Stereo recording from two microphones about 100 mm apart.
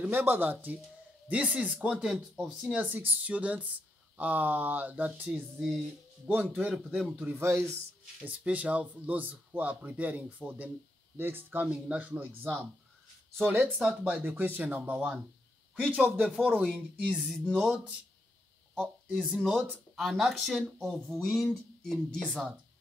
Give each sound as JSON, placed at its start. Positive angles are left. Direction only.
{"t": 0.0, "sound": "speech", "side_deg": -20}
{"t": 6.7, "sound": "speech", "side_deg": -5}
{"t": 7.2, "sound": "speech", "side_deg": -15}
{"t": 16.1, "sound": "speech", "side_deg": 0}
{"t": 19.7, "sound": "speech", "side_deg": 0}